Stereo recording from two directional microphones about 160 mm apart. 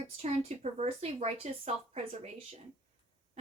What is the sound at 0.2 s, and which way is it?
Speech, 40° right (ahead or behind).